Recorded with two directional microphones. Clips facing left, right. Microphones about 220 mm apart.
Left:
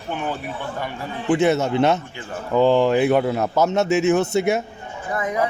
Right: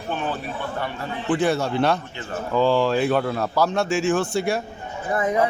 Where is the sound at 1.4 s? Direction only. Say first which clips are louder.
Left 3 dB; 20° left (ahead or behind).